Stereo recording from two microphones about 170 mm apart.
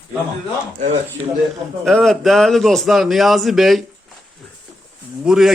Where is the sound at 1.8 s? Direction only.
Centre (ahead or behind).